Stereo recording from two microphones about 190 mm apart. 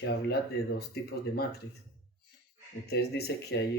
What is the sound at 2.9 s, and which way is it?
Speech, 55° left (ahead or behind).